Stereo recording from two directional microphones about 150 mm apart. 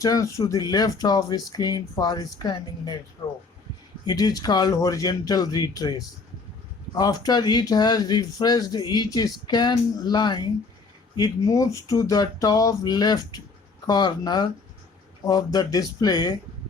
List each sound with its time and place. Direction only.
0.0 s speech: 20° left (ahead or behind)
4.0 s speech: 25° left (ahead or behind)
15.5 s speech: 25° left (ahead or behind)